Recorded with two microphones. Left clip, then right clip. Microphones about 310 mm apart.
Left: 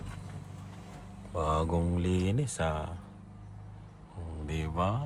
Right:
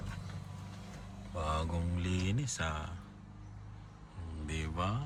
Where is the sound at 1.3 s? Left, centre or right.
Centre.